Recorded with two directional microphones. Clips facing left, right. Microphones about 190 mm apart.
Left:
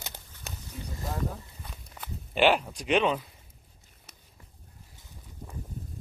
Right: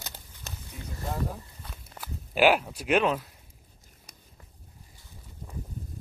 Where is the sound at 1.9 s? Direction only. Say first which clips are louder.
Right 1 dB; 5° right (ahead or behind).